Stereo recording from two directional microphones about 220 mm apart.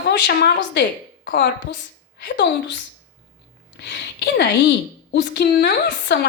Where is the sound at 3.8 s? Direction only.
50° left (ahead or behind).